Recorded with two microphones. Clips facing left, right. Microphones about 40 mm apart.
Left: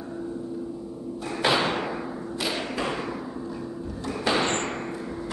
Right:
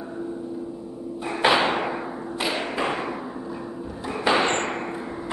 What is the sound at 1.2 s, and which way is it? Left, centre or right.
Thump, right.